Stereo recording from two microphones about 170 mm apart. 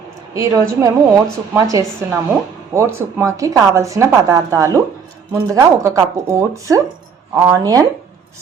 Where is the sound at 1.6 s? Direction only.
20° right (ahead or behind).